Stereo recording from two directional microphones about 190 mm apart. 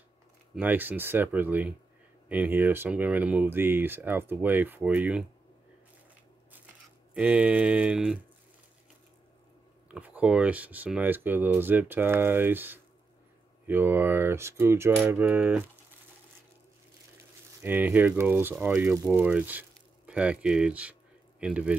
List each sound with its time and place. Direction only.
0.6 s speech: 10° right (ahead or behind)
7.2 s speech: 5° right (ahead or behind)
9.8 s speech: 5° right (ahead or behind)
17.6 s a man's voice: 10° right (ahead or behind)